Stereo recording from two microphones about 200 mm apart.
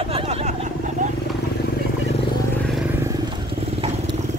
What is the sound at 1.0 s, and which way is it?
Vehicle, 40° right (ahead or behind).